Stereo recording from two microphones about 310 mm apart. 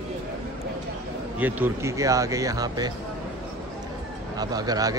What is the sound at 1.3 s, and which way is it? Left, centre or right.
Speech, centre.